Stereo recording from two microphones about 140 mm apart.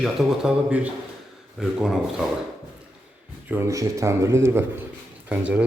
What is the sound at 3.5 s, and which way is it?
A man's voice, 20° right (ahead or behind).